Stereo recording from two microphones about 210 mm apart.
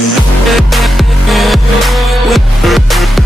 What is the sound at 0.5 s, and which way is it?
Music, centre (ahead or behind).